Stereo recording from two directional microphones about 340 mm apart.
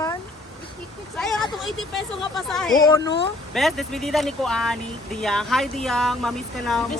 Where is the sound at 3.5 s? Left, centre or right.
Centre.